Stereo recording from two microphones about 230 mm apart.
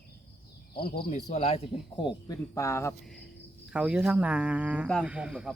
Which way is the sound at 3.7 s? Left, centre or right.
Centre.